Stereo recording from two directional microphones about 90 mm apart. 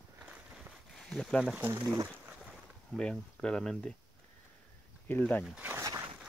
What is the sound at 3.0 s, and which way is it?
Speech, 10° left (ahead or behind).